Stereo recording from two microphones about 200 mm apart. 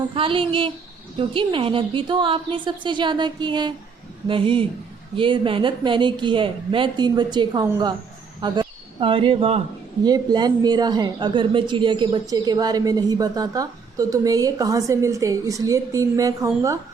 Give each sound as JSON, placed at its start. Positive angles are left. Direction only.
{"t": 0.1, "sound": "a woman's voice", "side_deg": -25}